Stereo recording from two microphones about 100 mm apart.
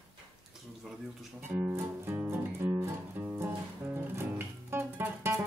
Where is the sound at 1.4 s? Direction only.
15° right (ahead or behind).